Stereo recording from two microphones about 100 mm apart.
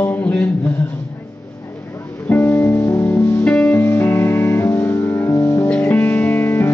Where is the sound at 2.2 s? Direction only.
20° left (ahead or behind).